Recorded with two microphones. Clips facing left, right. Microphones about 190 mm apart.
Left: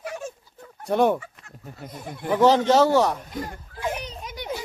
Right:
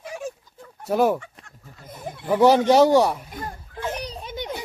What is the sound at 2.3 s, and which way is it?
Speech, 10° right (ahead or behind).